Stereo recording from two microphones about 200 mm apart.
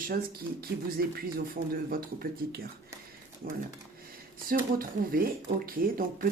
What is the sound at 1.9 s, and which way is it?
Speech, 50° right (ahead or behind).